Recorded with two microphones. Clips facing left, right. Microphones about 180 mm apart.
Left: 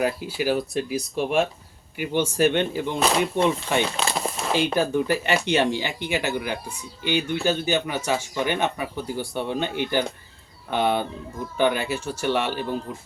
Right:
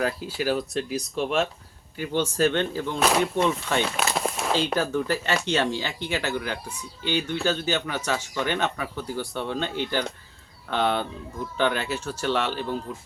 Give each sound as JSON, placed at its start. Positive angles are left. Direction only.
{"t": 0.0, "sound": "speech", "side_deg": 10}
{"t": 3.9, "sound": "a sound", "side_deg": -5}
{"t": 4.5, "sound": "speech", "side_deg": 15}